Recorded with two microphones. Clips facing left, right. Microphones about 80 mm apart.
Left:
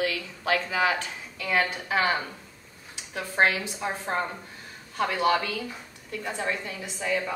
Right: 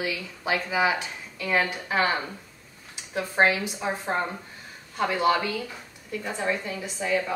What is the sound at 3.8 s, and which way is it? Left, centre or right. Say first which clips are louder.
A woman's voice: right 1 dB; centre.